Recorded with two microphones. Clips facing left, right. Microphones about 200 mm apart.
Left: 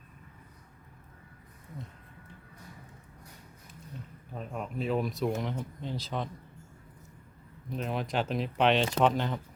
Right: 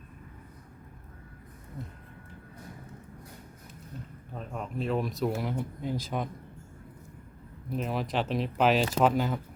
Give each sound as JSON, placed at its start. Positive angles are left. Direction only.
{"t": 4.4, "sound": "speech", "side_deg": 0}
{"t": 7.7, "sound": "speech", "side_deg": 0}